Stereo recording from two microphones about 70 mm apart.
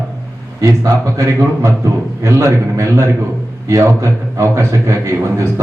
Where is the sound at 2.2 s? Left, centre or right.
Right.